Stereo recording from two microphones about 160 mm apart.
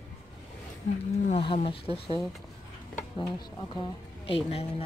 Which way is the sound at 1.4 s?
35° left (ahead or behind).